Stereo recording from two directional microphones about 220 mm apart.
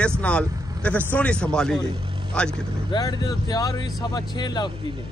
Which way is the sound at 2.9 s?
15° left (ahead or behind).